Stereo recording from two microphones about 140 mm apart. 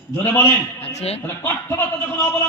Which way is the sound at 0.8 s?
50° left (ahead or behind).